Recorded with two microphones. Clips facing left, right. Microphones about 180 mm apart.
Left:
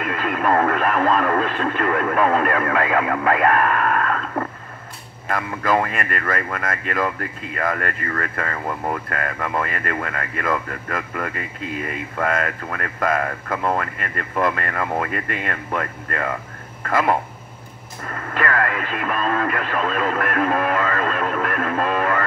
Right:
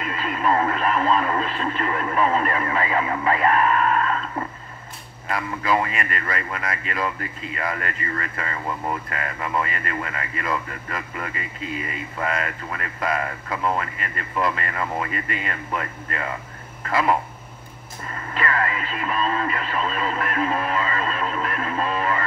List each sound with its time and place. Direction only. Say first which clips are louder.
0.0 s speech: left 3 dB; 55° left (ahead or behind)